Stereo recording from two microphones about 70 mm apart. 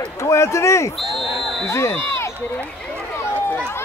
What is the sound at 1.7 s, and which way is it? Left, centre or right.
Speech, left.